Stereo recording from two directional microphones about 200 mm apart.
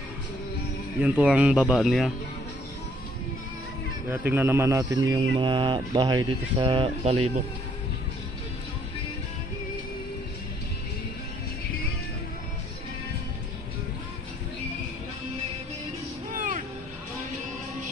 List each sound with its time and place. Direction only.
1.0 s speech: 5° right (ahead or behind)
4.1 s speech: 10° right (ahead or behind); by 7.2 s 25° right (ahead or behind)
16.3 s music: 40° right (ahead or behind)